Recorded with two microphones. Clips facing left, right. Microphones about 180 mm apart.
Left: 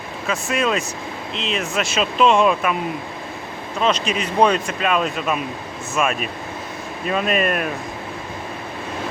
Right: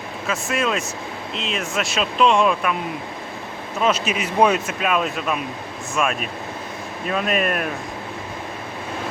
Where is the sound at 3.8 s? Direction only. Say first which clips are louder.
Left 1 dB; 5° right (ahead or behind).